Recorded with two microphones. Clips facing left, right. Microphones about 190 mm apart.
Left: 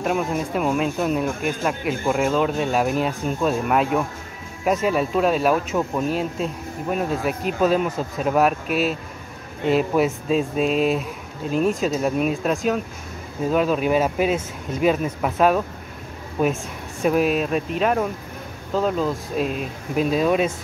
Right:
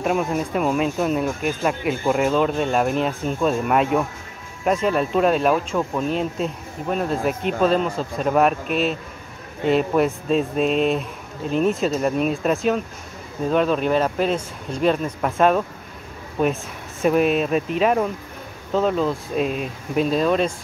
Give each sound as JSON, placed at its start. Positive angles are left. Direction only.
{"t": 0.0, "sound": "speech", "side_deg": 0}